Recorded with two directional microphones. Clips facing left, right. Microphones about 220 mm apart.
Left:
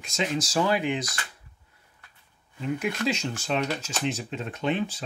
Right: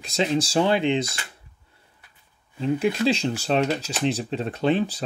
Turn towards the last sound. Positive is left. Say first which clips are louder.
# right 5 dB
turn(degrees=-35)  # may be behind; listen again after turning